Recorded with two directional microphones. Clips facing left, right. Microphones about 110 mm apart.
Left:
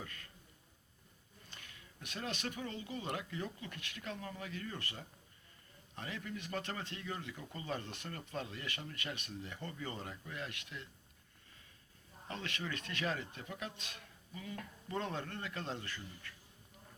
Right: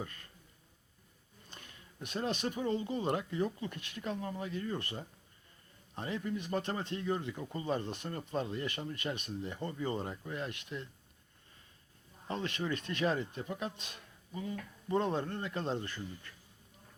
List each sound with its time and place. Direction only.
0.0 s a man's voice: 30° right (ahead or behind)
1.5 s a sound: 35° right (ahead or behind)
2.6 s a man's voice: 30° right (ahead or behind)
6.0 s a man's voice: 25° right (ahead or behind)
12.6 s a man's voice: 25° right (ahead or behind)